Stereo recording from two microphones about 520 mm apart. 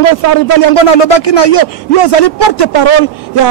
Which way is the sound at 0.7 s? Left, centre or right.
Left.